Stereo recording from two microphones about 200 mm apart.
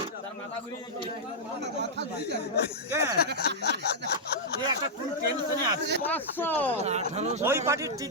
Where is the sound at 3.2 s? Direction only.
55° left (ahead or behind).